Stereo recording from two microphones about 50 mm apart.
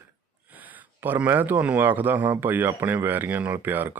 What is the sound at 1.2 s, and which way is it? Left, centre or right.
Speech, right.